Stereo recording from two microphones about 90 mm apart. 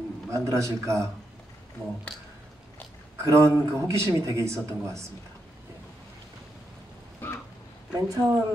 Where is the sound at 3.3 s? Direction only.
30° right (ahead or behind).